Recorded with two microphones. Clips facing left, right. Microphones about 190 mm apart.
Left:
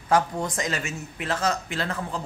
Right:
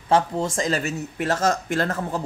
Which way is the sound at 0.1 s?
25° right (ahead or behind).